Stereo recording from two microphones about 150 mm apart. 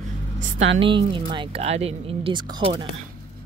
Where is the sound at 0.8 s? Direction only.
35° right (ahead or behind).